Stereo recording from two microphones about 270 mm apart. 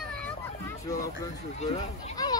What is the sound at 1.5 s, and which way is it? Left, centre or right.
Speech, left.